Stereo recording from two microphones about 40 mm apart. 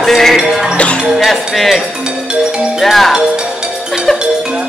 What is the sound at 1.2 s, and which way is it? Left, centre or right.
Speech, centre.